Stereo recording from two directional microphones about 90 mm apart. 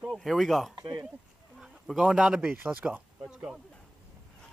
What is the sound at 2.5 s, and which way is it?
Speech, 20° right (ahead or behind).